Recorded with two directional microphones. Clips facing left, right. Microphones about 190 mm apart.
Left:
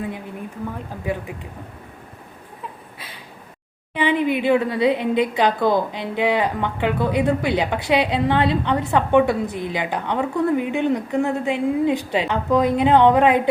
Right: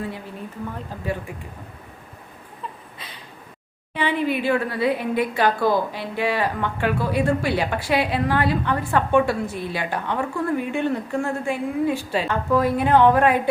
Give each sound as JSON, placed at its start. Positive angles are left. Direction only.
{"t": 3.9, "sound": "a woman's voice", "side_deg": 15}